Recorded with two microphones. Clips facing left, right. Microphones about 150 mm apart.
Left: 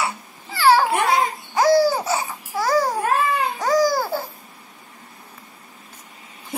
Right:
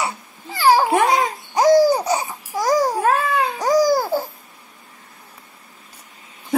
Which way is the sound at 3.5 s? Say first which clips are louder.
Right 3 dB; 15° right (ahead or behind).